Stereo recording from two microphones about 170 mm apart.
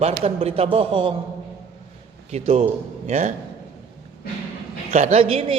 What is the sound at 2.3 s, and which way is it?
A man's voice, 40° right (ahead or behind).